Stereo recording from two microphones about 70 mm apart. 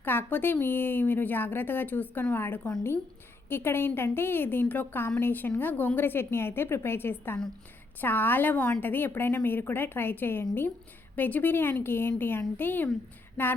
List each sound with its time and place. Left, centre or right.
0.0 s a woman's voice: left